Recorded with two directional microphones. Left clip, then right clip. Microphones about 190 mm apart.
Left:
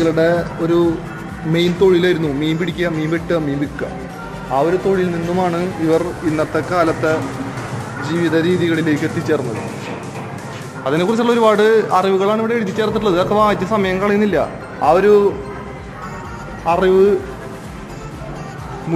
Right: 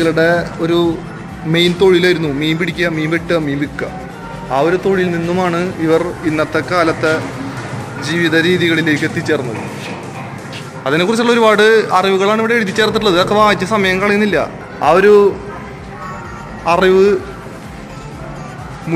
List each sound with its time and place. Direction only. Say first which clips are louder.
0.0 s a man's voice: right 2 dB; centre (ahead or behind)
10.8 s a man's voice: right 3 dB; 5° left (ahead or behind)
14.8 s a man's voice: right 3 dB; 5° right (ahead or behind)
16.6 s a man's voice: right 2 dB; centre (ahead or behind)